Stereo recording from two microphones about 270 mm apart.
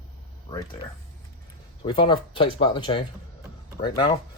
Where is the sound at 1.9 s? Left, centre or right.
Centre.